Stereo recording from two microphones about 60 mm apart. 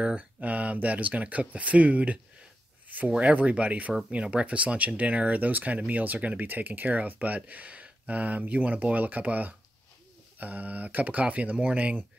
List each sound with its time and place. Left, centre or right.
0.0 s speech: right